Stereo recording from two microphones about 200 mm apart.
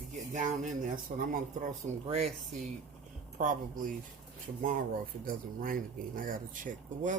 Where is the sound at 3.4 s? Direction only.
40° right (ahead or behind).